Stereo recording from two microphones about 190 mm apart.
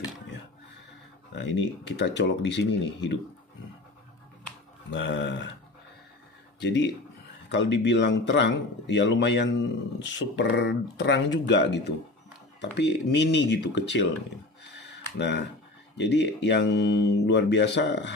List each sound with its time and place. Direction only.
1.3 s speech: 70° left (ahead or behind)
4.9 s speech: 70° left (ahead or behind)
6.6 s speech: 65° left (ahead or behind)
14.8 s a sound: 65° left (ahead or behind)
16.0 s speech: 65° left (ahead or behind)